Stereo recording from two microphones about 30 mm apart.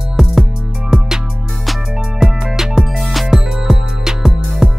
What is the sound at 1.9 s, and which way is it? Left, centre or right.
Music, centre.